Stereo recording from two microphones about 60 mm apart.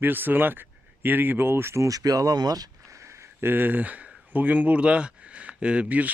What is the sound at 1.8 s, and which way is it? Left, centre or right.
Speech, right.